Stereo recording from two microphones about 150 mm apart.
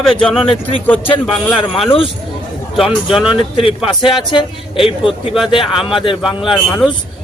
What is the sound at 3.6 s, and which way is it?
A man's voice, 40° left (ahead or behind).